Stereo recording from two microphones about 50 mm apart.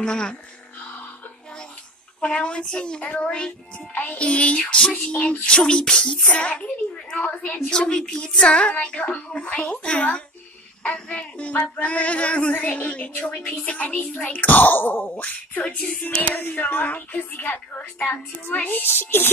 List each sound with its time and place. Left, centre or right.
0.0 s beatboxing: centre
2.1 s a woman's voice: left
5.7 s beatboxing: centre
6.3 s a woman's voice: left
16.0 s a woman's voice: left
16.3 s a woman's voice: left